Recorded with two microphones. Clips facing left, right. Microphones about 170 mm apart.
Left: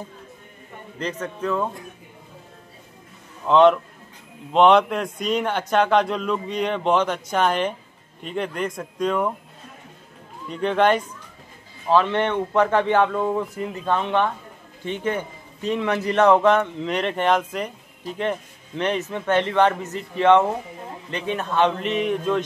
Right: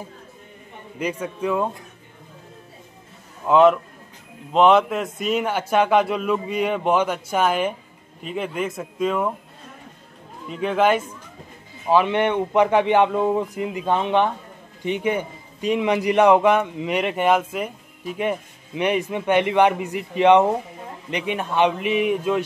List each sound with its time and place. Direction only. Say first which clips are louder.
0.9 s a man's voice: right 2 dB; 10° right (ahead or behind)
3.4 s a man's voice: even; 5° right (ahead or behind)
10.5 s a man's voice: even; 5° right (ahead or behind)